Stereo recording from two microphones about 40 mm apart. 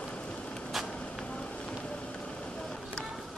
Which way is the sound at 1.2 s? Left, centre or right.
Left.